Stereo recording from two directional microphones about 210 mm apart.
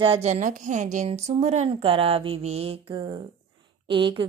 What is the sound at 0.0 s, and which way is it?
A woman's voice, 30° right (ahead or behind).